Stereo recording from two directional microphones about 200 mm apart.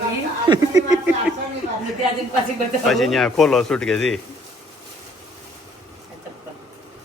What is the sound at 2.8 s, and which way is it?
Speech, centre (ahead or behind).